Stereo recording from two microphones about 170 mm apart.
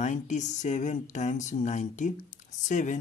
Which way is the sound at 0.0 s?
45° left (ahead or behind).